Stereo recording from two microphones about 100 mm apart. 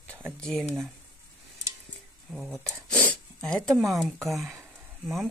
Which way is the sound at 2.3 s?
5° left (ahead or behind).